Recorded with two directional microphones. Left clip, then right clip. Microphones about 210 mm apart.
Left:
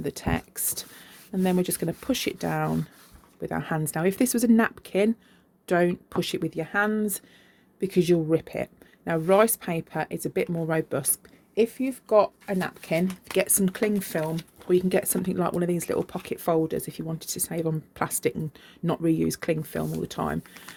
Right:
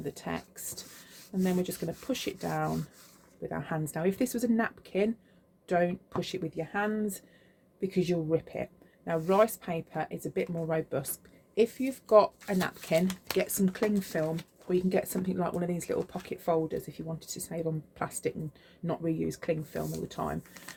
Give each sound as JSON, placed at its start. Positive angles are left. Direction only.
{"t": 0.0, "sound": "speech", "side_deg": 45}
{"t": 11.5, "sound": "speech", "side_deg": 25}
{"t": 13.3, "sound": "speech", "side_deg": 40}